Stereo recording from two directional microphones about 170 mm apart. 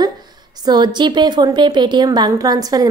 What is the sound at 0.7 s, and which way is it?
Speech, 25° right (ahead or behind).